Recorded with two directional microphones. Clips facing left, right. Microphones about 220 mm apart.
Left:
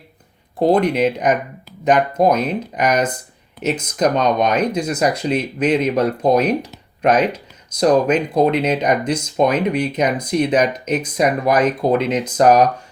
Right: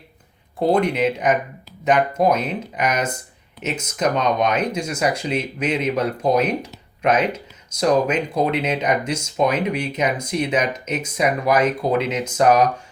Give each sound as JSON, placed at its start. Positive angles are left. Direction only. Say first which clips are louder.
{"t": 0.7, "sound": "speech", "louder": "left 2 dB", "side_deg": 40}
{"t": 11.9, "sound": "speech", "louder": "left 3 dB", "side_deg": -5}
{"t": 12.4, "sound": "speech", "louder": "left 3 dB", "side_deg": 40}